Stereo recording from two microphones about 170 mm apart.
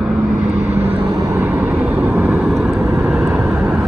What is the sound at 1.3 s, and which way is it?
Vehicle, 10° right (ahead or behind).